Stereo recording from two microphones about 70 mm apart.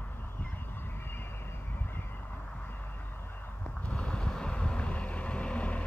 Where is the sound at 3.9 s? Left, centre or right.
Centre.